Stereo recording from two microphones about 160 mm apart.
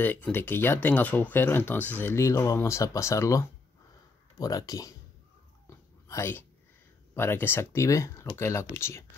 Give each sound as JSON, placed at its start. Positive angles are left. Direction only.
{"t": 0.0, "sound": "speech", "side_deg": 10}
{"t": 5.7, "sound": "whispering", "side_deg": 15}
{"t": 7.2, "sound": "speech", "side_deg": 15}